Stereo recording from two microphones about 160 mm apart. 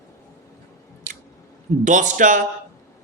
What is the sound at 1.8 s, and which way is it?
Speech, 50° right (ahead or behind).